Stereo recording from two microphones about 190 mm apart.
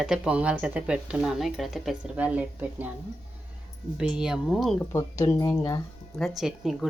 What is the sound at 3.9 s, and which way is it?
Speech, 5° right (ahead or behind).